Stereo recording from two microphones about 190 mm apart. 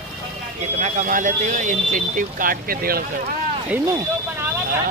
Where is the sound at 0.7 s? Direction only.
40° right (ahead or behind).